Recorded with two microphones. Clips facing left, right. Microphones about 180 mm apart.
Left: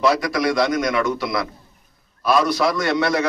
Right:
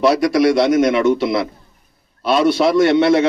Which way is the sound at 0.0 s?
25° right (ahead or behind).